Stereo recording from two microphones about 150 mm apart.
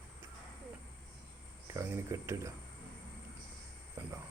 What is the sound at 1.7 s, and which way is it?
Speech, 20° right (ahead or behind).